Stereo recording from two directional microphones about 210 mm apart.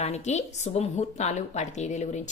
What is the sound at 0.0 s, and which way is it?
Speech, 30° left (ahead or behind).